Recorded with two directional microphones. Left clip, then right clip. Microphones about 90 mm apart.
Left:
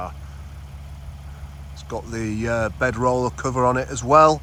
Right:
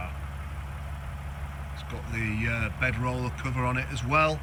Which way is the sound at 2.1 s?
20° left (ahead or behind).